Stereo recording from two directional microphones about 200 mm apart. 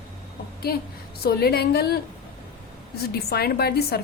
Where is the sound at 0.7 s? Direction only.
50° left (ahead or behind).